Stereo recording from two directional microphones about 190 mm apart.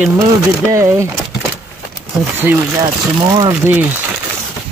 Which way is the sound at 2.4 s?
20° right (ahead or behind).